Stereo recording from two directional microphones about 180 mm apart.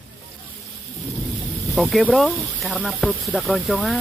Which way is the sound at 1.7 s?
Centre (ahead or behind).